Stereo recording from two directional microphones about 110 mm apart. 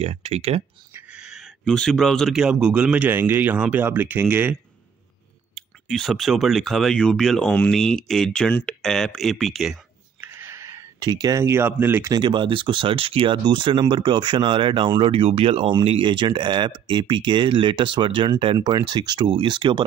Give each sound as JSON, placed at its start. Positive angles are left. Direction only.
{"t": 0.0, "sound": "speech", "side_deg": -70}
{"t": 1.1, "sound": "speech", "side_deg": -5}
{"t": 5.5, "sound": "speech", "side_deg": 5}
{"t": 10.2, "sound": "a sound", "side_deg": -20}
{"t": 11.0, "sound": "speech", "side_deg": -40}
{"t": 12.1, "sound": "speech", "side_deg": -45}